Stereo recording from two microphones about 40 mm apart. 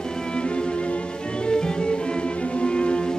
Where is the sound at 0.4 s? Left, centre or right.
Left.